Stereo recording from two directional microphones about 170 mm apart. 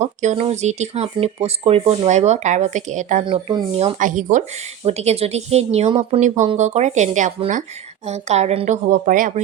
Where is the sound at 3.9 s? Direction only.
50° right (ahead or behind).